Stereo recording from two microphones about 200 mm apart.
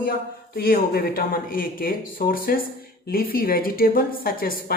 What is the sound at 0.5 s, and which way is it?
Speech, 50° left (ahead or behind).